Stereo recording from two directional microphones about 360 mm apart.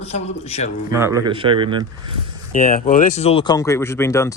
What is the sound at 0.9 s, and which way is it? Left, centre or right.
Speech, centre.